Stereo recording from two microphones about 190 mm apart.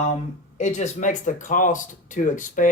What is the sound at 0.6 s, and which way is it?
Speech, 40° left (ahead or behind).